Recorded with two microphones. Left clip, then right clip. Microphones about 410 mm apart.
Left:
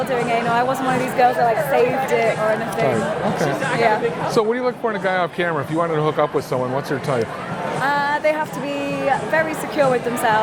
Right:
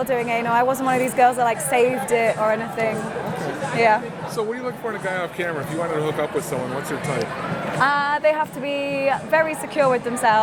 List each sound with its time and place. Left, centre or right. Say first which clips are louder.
0.1 s a woman's voice: left 1 dB; right
4.4 s speech: left 6 dB; left
7.8 s a woman's voice: right 1 dB; right